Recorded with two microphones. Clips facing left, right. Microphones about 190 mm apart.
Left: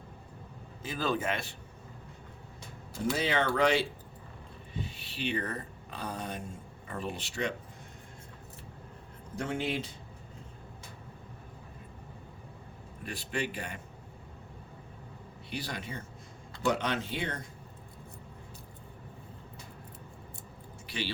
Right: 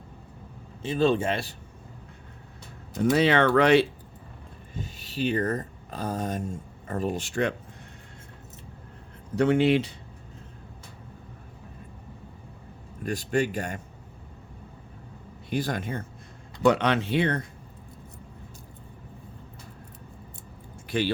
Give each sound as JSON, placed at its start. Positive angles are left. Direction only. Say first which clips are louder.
{"t": 0.8, "sound": "speech", "louder": "right 9 dB", "side_deg": -30}
{"t": 3.1, "sound": "speech", "louder": "right 9 dB", "side_deg": -70}
{"t": 4.7, "sound": "speech", "louder": "right 3 dB", "side_deg": -40}
{"t": 9.3, "sound": "speech", "louder": "right 12 dB", "side_deg": -75}
{"t": 13.1, "sound": "a man's voice", "louder": "right 9 dB", "side_deg": -45}
{"t": 15.4, "sound": "a man's voice", "louder": "right 10 dB", "side_deg": -50}
{"t": 16.6, "sound": "speech", "louder": "right 8 dB", "side_deg": -70}
{"t": 20.8, "sound": "a sound", "louder": "right 10 dB", "side_deg": -50}